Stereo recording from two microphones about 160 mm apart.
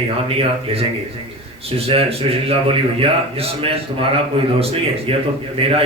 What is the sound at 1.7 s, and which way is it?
A man's voice, 35° right (ahead or behind).